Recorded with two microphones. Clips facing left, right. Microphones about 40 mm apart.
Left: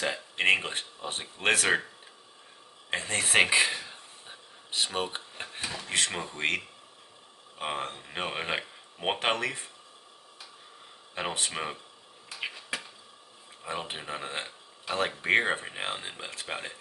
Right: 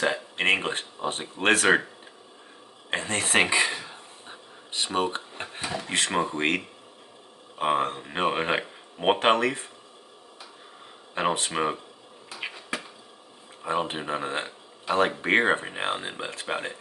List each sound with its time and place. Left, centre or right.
0.0 s a sound: centre
0.7 s speech: centre
2.9 s speech: centre
3.7 s a sound: centre
5.3 s drawer open or close: centre
5.6 s speech: centre
11.5 s speech: centre
12.4 s finger snapping: centre
13.7 s speech: centre